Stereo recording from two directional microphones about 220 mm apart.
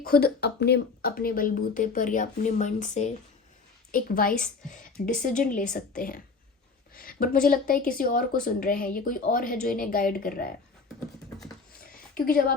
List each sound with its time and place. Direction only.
0.0 s a woman's voice: 45° left (ahead or behind)
12.1 s speech: 40° left (ahead or behind)